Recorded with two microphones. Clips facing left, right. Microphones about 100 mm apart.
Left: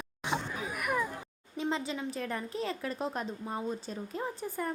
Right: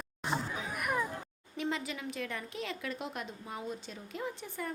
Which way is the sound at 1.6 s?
30° left (ahead or behind).